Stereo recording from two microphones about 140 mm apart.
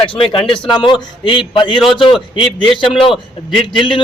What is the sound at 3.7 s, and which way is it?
Speech, 35° left (ahead or behind).